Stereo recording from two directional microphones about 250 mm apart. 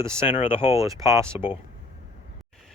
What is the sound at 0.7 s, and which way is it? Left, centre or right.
Speech, centre.